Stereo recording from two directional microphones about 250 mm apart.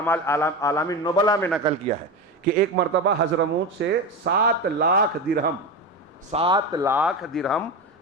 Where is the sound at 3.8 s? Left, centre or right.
Right.